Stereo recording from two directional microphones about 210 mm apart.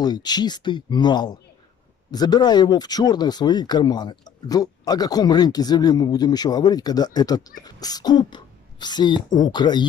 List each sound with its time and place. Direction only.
0.0 s speech: 20° left (ahead or behind)